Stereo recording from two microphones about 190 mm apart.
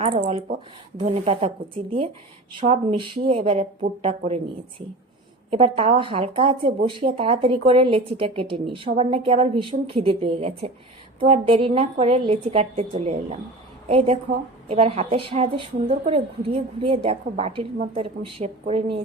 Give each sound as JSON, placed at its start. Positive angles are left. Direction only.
{"t": 1.0, "sound": "speech", "side_deg": -35}
{"t": 5.5, "sound": "a woman's voice", "side_deg": -30}